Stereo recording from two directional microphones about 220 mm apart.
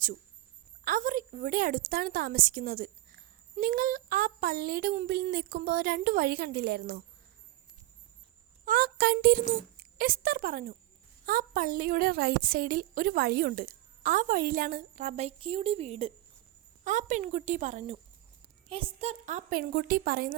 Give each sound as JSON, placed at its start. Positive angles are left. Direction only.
{"t": 0.9, "sound": "a woman's voice", "side_deg": -40}
{"t": 8.6, "sound": "a woman's voice", "side_deg": -45}